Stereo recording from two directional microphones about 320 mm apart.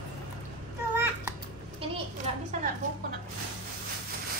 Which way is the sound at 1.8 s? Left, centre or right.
Centre.